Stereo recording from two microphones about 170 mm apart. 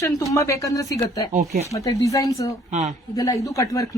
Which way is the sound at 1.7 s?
20° left (ahead or behind).